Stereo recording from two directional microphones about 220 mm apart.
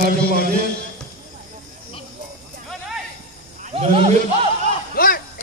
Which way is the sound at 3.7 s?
25° right (ahead or behind).